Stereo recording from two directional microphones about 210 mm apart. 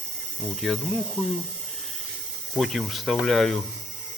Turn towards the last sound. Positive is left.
turn(degrees=0)  # may be behind; listen again after turning